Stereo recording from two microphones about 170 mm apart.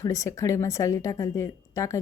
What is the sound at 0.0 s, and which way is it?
A woman's voice, 20° left (ahead or behind).